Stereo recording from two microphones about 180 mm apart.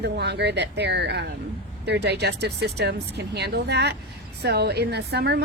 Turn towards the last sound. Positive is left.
turn(degrees=-65)  # may be behind; listen again after turning